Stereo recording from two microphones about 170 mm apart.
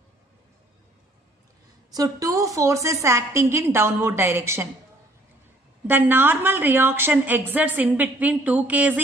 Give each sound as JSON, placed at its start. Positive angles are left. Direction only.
{"t": 1.9, "sound": "a woman's voice", "side_deg": -20}
{"t": 5.9, "sound": "a woman's voice", "side_deg": -10}